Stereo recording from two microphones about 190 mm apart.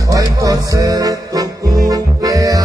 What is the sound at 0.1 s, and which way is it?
Music, 20° right (ahead or behind).